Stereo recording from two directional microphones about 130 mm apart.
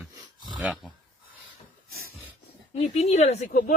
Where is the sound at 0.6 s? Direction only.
5° right (ahead or behind).